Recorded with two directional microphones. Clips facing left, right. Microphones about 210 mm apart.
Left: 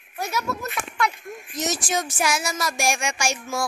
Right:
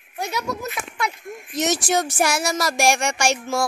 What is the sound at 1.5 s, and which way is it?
Speech, 70° right (ahead or behind).